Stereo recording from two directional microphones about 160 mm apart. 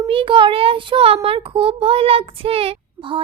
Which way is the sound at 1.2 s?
35° right (ahead or behind).